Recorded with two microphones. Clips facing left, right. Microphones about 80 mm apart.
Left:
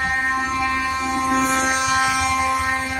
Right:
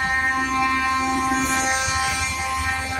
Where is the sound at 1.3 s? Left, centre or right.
Left.